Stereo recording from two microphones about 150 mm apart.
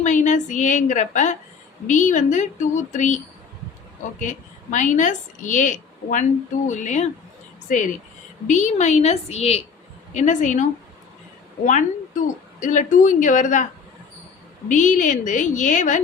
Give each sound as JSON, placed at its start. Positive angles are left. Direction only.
{"t": 0.0, "sound": "a woman's voice", "side_deg": 55}
{"t": 4.2, "sound": "a woman's voice", "side_deg": 55}
{"t": 8.4, "sound": "speech", "side_deg": 55}
{"t": 10.2, "sound": "a woman's voice", "side_deg": 55}
{"t": 14.7, "sound": "a woman's voice", "side_deg": 55}